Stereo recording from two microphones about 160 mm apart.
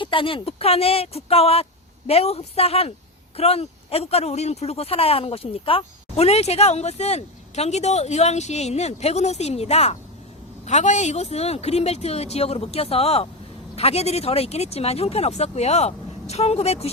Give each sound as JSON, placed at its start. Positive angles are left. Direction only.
{"t": 0.0, "sound": "speech", "side_deg": 30}